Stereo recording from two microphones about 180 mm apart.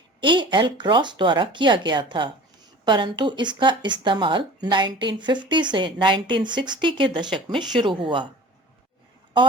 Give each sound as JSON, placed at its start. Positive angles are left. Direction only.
{"t": 0.2, "sound": "speech", "side_deg": -25}